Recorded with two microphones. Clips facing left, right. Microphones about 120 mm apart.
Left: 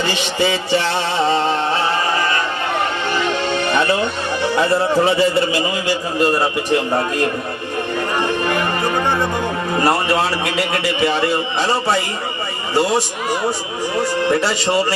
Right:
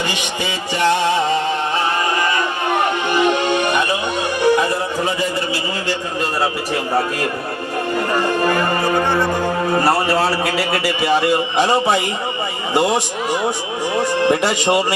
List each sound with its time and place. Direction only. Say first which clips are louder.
3.1 s music: right 5 dB; 15° right (ahead or behind)
6.2 s a man's voice: left 4 dB; centre (ahead or behind)
9.8 s a man's voice: left 2 dB; centre (ahead or behind); by 12.0 s 15° right (ahead or behind)
14.0 s a man's voice: right 1 dB; 15° right (ahead or behind)